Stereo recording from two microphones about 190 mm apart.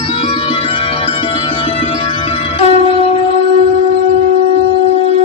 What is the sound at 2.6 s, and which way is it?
Wind instrument, 30° left (ahead or behind).